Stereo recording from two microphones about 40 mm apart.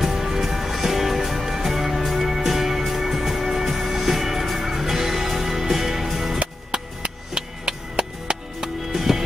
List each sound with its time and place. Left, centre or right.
0.0 s music: centre
7.0 s music: right
8.9 s music: centre